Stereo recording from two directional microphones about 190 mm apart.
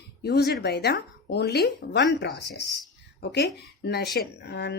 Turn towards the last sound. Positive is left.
turn(degrees=60)  # may be behind; listen again after turning